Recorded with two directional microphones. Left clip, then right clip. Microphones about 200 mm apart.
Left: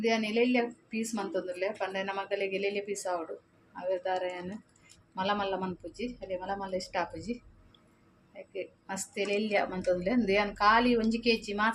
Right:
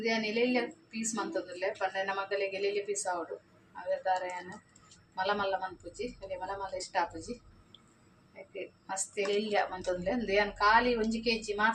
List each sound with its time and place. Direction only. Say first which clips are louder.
0.0 s a woman's voice: left 2 dB; 30° left (ahead or behind)
8.9 s a woman's voice: even; 35° left (ahead or behind)